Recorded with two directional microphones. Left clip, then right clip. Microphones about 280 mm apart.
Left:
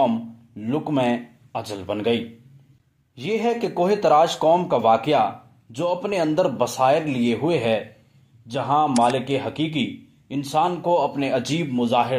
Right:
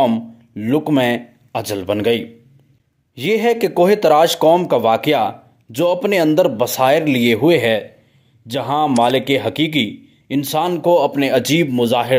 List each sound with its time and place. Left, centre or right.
0.0 s speech: right